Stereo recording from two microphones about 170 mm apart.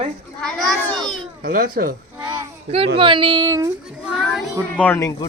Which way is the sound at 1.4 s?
55° right (ahead or behind).